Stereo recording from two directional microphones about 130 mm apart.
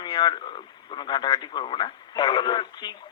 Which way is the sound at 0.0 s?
35° left (ahead or behind).